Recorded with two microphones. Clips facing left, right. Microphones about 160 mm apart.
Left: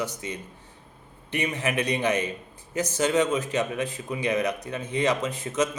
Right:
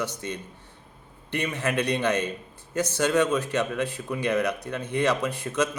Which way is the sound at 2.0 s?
70° right (ahead or behind).